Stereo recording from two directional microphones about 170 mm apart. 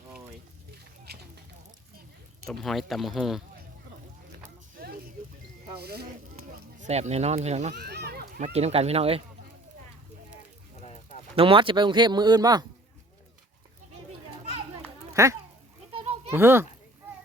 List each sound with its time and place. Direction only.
1.1 s a sound: 70° right (ahead or behind)
2.5 s speech: centre (ahead or behind)
5.8 s speech: 70° right (ahead or behind)
6.7 s speech: 45° right (ahead or behind)
7.8 s children playing: 75° right (ahead or behind)
8.5 s speech: 40° right (ahead or behind)
10.8 s a sound: 40° left (ahead or behind)
11.3 s speech: 30° right (ahead or behind)
14.8 s children playing: 15° right (ahead or behind)
15.9 s goat: 30° right (ahead or behind)
16.3 s a child's voice: 15° right (ahead or behind)